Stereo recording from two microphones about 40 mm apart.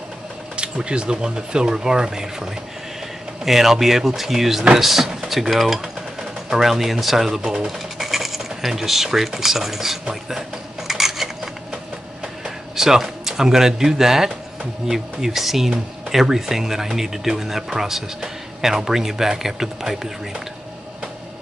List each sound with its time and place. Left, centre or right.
0.6 s speech: right; by 9.9 s centre
10.9 s a sound: centre
12.4 s speech: centre